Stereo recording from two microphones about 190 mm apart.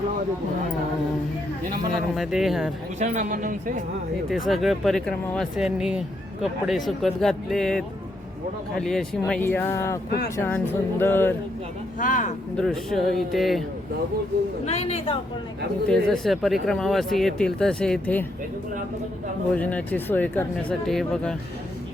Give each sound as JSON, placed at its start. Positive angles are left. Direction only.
{"t": 2.1, "sound": "speech", "side_deg": 0}
{"t": 3.0, "sound": "speech", "side_deg": -40}
{"t": 4.3, "sound": "speech", "side_deg": 0}
{"t": 11.9, "sound": "speech", "side_deg": 45}
{"t": 12.5, "sound": "speech", "side_deg": 0}
{"t": 14.6, "sound": "a woman's voice", "side_deg": 35}
{"t": 15.9, "sound": "speech", "side_deg": 5}
{"t": 19.5, "sound": "speech", "side_deg": 5}